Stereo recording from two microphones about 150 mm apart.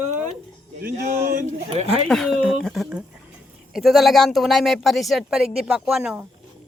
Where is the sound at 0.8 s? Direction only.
65° right (ahead or behind).